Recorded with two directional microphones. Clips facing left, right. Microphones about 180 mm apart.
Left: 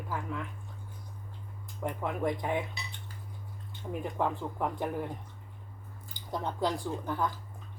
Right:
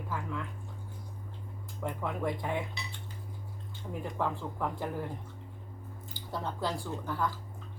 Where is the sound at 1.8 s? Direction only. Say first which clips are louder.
Left 2 dB; 15° left (ahead or behind).